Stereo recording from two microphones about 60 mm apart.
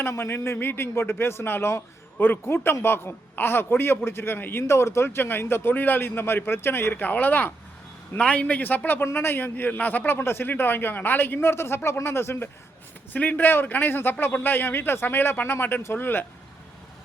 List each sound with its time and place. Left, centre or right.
0.0 s a man's voice: left
4.6 s a man's voice: left
13.1 s a man's voice: left